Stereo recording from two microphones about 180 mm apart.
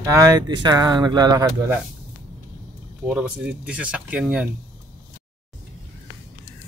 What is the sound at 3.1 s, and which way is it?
Speech, 5° right (ahead or behind).